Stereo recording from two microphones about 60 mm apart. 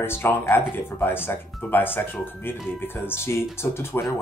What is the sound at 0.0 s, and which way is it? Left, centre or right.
Speech, left.